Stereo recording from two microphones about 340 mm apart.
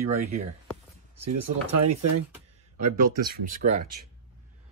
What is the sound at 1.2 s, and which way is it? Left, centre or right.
Speech, right.